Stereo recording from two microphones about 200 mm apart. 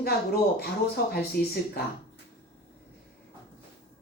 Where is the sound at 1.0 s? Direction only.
45° left (ahead or behind).